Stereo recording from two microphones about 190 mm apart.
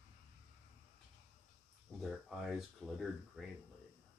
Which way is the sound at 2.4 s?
Centre (ahead or behind).